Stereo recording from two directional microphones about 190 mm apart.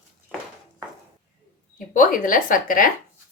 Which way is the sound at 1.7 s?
45° left (ahead or behind).